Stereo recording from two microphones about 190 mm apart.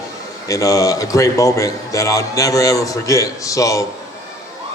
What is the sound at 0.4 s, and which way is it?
A man's voice, 15° left (ahead or behind).